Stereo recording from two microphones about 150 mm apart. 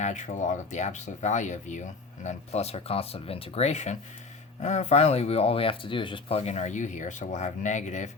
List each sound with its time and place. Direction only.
0.0 s speech: 55° left (ahead or behind)